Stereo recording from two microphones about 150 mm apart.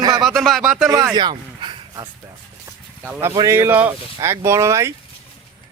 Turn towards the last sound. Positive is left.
turn(degrees=-20)  # may be behind; listen again after turning